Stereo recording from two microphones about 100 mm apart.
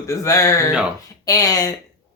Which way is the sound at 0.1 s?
35° left (ahead or behind).